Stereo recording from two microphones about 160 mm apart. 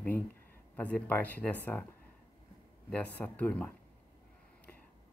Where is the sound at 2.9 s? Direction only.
10° left (ahead or behind).